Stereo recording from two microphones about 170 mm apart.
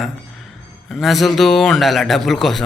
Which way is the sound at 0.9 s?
Centre (ahead or behind).